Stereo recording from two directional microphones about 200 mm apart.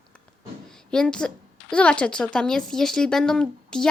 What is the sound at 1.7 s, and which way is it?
Speech, 5° left (ahead or behind).